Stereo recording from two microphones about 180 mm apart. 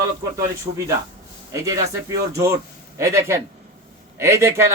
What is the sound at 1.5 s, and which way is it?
Speech, 20° right (ahead or behind).